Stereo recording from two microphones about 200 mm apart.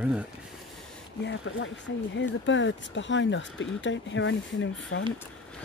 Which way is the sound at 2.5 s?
65° left (ahead or behind).